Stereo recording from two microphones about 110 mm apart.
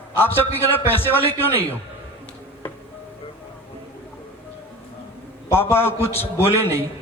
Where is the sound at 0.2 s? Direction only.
20° left (ahead or behind).